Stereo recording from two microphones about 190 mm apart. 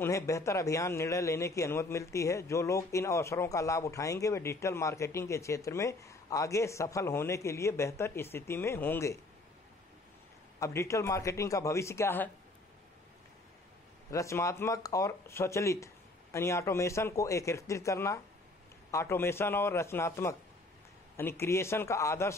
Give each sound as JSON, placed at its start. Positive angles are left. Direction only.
{"t": 0.0, "sound": "speech", "side_deg": 15}
{"t": 10.6, "sound": "speech", "side_deg": 15}
{"t": 14.1, "sound": "speech", "side_deg": 15}